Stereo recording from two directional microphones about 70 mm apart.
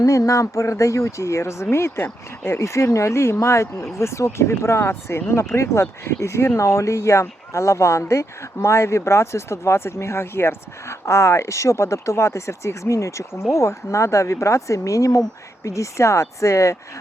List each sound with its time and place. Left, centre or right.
0.0 s speech: left